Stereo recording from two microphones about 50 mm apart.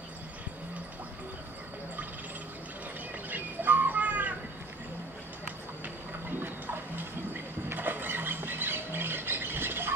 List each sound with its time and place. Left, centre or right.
3.3 s bird: right
7.7 s squawk: right